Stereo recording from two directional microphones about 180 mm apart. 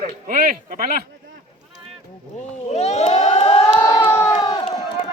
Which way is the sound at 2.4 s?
40° left (ahead or behind).